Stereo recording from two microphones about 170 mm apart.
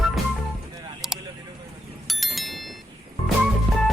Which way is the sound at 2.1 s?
Centre (ahead or behind).